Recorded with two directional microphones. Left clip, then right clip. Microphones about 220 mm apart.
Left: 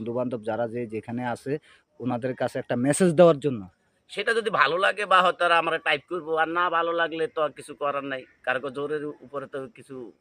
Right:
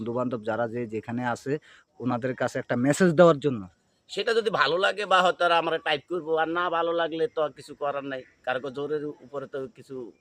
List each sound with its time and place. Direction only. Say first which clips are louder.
0.0 s a man's voice: even; centre (ahead or behind)